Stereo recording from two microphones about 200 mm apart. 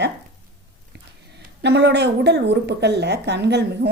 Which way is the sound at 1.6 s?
60° right (ahead or behind).